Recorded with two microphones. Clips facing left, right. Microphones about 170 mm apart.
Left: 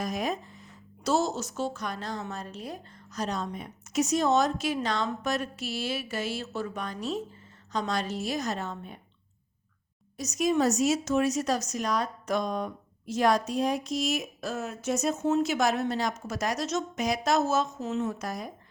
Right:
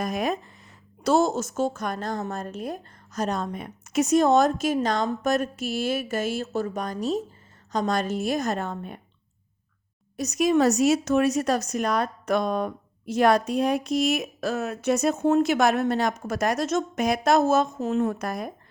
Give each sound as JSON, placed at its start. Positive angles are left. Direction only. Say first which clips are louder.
{"t": 0.0, "sound": "a woman's voice", "louder": "right 4 dB", "side_deg": -60}
{"t": 10.2, "sound": "speech", "louder": "right 5 dB", "side_deg": -65}